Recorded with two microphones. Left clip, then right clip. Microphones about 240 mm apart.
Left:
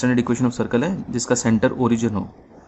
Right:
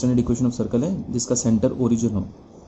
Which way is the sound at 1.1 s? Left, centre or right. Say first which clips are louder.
Left 3 dB; left.